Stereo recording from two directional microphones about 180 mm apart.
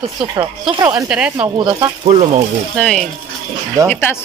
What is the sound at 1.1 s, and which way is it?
Speech, 5° right (ahead or behind).